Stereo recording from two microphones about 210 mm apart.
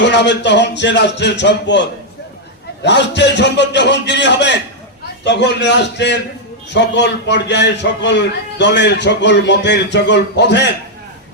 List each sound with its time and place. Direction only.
0.0 s a man's voice: 55° left (ahead or behind)
2.8 s a man's voice: 55° left (ahead or behind)